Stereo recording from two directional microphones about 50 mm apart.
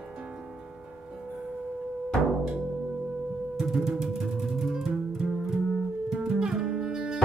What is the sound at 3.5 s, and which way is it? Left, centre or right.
Music, centre.